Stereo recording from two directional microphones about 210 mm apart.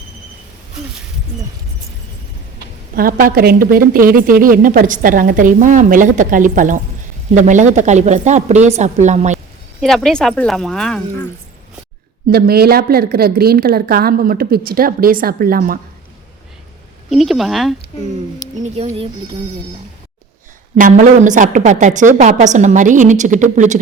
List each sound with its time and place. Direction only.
2.9 s a woman's voice: 45° right (ahead or behind)
9.8 s speech: centre (ahead or behind)
12.3 s a woman's voice: 50° right (ahead or behind)
17.1 s speech: centre (ahead or behind)
18.6 s a woman's voice: 30° right (ahead or behind)
20.7 s a woman's voice: 40° right (ahead or behind)